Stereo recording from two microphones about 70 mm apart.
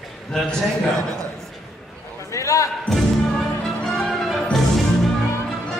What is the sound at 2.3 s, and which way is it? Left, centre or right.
Basketball bounce, left.